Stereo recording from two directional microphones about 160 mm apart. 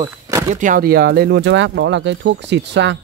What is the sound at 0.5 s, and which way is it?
Speech, 55° right (ahead or behind).